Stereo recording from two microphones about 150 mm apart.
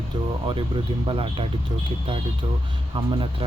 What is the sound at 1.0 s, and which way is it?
Speech, 35° right (ahead or behind).